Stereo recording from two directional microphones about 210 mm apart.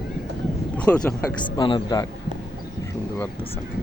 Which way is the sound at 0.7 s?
5° left (ahead or behind).